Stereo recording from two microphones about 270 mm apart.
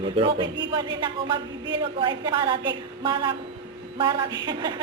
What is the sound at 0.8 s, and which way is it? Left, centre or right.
Speech, centre.